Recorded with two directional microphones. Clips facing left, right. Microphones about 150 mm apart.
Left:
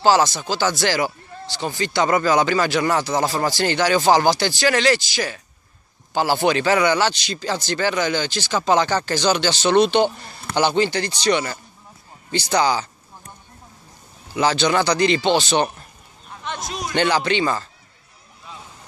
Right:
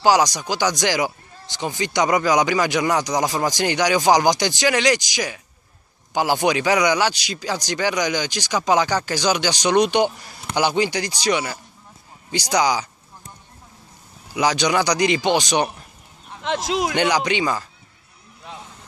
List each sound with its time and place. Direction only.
0.0 s a man's voice: 15° right (ahead or behind)
14.3 s a man's voice: 15° right (ahead or behind)
16.4 s speech: 90° right
16.9 s a man's voice: 15° right (ahead or behind)
18.4 s vehicle: 65° right (ahead or behind)